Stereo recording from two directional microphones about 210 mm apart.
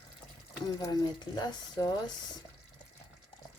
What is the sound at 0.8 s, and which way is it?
Speech, 20° left (ahead or behind).